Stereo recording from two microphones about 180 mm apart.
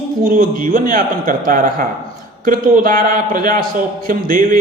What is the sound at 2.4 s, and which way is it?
Speech, 50° right (ahead or behind).